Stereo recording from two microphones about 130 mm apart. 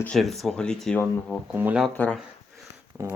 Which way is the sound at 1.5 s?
10° right (ahead or behind).